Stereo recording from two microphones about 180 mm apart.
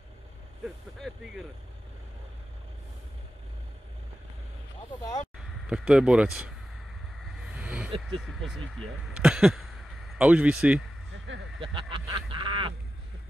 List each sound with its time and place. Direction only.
0.9 s speech: centre (ahead or behind)
5.7 s speech: 5° right (ahead or behind)
7.3 s a sound: 5° right (ahead or behind)
8.2 s speech: centre (ahead or behind)
11.6 s speech: 30° right (ahead or behind)